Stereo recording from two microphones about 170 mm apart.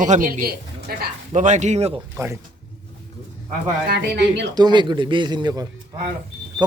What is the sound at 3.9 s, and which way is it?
Speech, 85° right.